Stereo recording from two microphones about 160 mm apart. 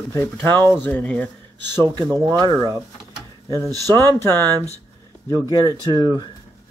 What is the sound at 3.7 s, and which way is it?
Speech, 25° right (ahead or behind).